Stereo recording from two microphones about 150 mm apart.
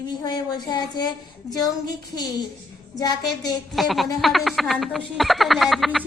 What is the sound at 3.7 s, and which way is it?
Speech, centre (ahead or behind).